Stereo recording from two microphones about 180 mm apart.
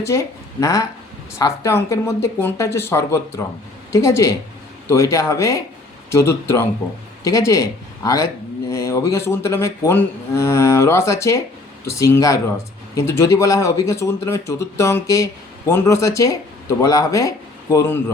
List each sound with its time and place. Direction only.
0.0 s speech: 15° left (ahead or behind)